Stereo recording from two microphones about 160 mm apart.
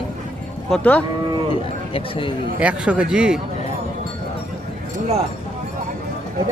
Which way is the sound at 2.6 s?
5° right (ahead or behind).